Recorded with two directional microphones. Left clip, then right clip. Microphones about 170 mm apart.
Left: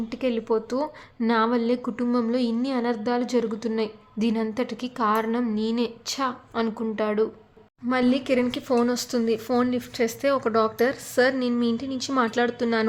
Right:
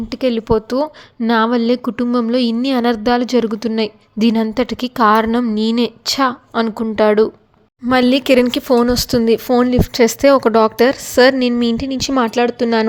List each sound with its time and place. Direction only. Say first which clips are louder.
0.1 s a sound: right 9 dB; 40° right (ahead or behind)
3.8 s speech: right 9 dB; 45° right (ahead or behind)
7.9 s speech: right 10 dB; 60° right (ahead or behind); by 12.9 s 40° right (ahead or behind)